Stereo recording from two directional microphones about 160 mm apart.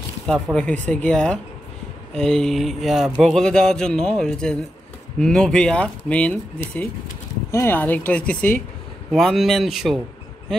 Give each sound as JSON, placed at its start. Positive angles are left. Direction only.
{"t": 0.3, "sound": "speech", "side_deg": 5}